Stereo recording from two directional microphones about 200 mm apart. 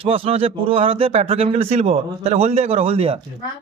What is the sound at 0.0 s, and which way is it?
A man's voice, 30° right (ahead or behind).